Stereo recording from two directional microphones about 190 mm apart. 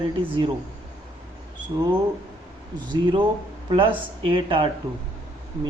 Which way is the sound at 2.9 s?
25° right (ahead or behind).